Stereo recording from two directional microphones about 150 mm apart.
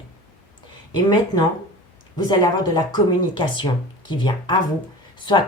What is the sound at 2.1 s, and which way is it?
Speech, 30° left (ahead or behind).